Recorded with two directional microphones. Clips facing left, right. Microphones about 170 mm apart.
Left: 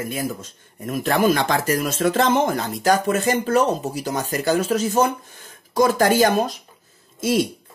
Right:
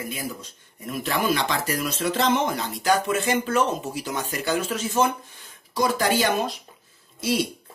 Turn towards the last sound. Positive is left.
turn(degrees=50)  # may be behind; listen again after turning